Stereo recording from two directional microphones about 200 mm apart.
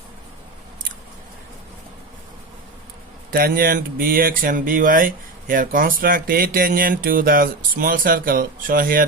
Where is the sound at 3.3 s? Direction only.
50° right (ahead or behind).